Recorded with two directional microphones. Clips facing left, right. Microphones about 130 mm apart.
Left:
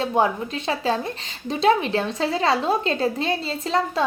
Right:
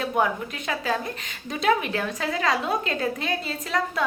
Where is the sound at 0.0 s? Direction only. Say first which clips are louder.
Left 3 dB; 30° left (ahead or behind).